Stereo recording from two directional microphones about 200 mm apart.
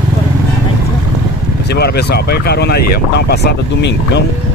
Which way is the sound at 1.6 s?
55° left (ahead or behind).